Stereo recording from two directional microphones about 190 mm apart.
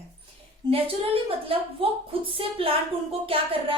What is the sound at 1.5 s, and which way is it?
A woman's voice, 30° right (ahead or behind).